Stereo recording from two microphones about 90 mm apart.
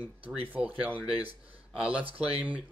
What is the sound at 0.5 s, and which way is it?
Speech, 15° right (ahead or behind).